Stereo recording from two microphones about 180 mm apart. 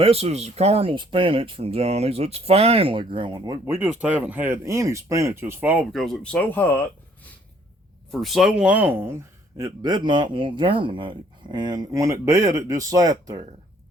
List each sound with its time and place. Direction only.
0.0 s speech: 35° right (ahead or behind); by 5.8 s 10° right (ahead or behind)
5.9 s speech: centre (ahead or behind)
8.1 s speech: centre (ahead or behind); by 13.4 s 20° right (ahead or behind)